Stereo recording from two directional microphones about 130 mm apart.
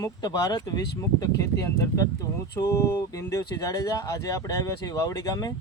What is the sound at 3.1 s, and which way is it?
Speech, 25° left (ahead or behind).